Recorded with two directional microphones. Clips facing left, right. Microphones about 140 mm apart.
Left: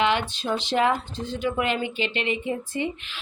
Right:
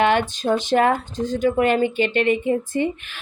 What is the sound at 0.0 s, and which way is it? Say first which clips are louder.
Speech: right 5 dB; 50° right (ahead or behind).